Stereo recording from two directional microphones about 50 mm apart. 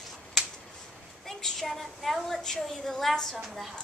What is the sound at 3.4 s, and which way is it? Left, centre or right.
Speech, centre.